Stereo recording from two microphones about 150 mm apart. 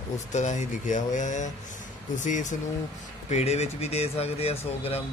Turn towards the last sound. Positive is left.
turn(degrees=40)  # may be behind; listen again after turning